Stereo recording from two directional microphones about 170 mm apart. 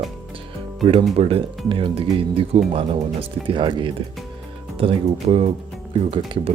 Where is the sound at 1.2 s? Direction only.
35° right (ahead or behind).